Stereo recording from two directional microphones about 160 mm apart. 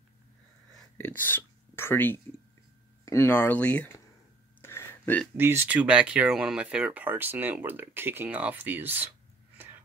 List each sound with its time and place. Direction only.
0.9 s speech: 10° left (ahead or behind)
4.6 s a sound: 15° left (ahead or behind)
5.4 s speech: 15° right (ahead or behind)